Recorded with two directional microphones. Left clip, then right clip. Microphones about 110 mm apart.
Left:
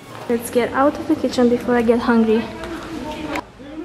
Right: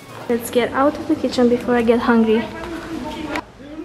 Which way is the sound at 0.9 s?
15° right (ahead or behind).